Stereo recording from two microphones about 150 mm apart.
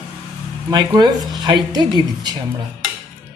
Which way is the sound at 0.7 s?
30° right (ahead or behind).